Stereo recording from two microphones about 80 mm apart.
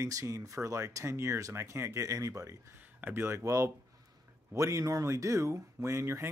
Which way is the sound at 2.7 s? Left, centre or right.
Right.